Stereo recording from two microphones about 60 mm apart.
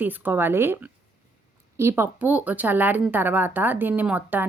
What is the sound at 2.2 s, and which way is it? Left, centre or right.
A woman's voice, right.